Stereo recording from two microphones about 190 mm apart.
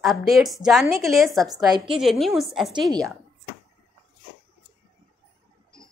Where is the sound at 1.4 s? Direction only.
20° right (ahead or behind).